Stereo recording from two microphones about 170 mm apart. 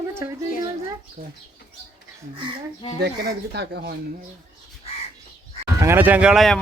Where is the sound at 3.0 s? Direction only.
75° right (ahead or behind).